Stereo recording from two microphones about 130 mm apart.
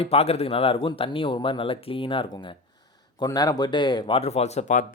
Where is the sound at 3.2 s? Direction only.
30° left (ahead or behind); by 4.8 s 65° left (ahead or behind).